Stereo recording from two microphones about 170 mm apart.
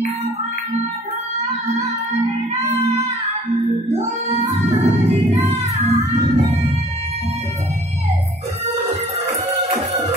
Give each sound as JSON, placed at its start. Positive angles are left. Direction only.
{"t": 3.9, "sound": "music", "side_deg": -40}